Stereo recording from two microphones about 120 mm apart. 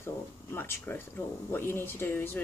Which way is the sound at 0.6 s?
20° left (ahead or behind).